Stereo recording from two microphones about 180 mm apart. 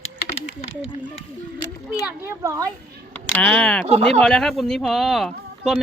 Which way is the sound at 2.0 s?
15° right (ahead or behind).